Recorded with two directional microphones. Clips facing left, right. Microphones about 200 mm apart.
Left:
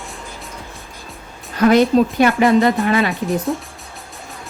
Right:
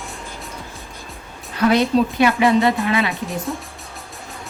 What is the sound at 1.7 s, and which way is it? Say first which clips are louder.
A woman's voice: left 4 dB; 45° left (ahead or behind).